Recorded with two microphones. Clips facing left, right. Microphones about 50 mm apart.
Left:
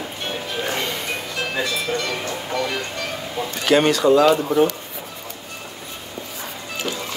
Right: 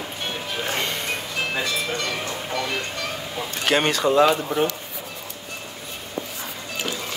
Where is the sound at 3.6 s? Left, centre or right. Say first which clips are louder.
Left 5 dB; right.